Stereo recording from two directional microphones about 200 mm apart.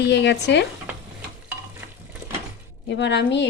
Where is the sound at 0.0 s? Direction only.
60° left (ahead or behind).